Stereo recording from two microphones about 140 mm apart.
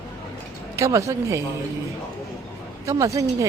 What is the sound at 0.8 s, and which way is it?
Speech, 20° right (ahead or behind).